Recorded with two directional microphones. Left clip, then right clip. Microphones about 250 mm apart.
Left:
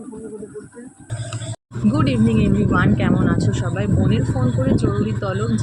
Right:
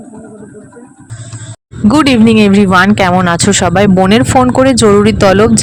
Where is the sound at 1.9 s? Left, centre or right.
Right.